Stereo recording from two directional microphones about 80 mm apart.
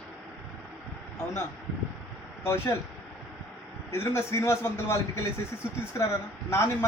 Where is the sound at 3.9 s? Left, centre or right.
Left.